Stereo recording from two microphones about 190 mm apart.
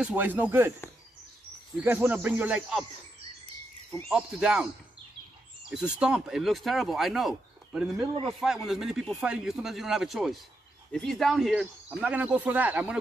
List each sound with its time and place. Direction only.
0.0 s speech: 10° right (ahead or behind)
1.8 s speech: 10° right (ahead or behind)
4.1 s speech: 5° right (ahead or behind)
5.7 s speech: 5° right (ahead or behind)